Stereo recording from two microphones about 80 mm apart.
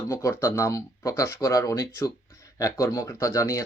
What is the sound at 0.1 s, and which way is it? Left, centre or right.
Speech, left.